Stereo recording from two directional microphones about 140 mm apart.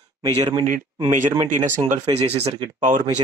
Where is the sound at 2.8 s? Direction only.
70° right (ahead or behind).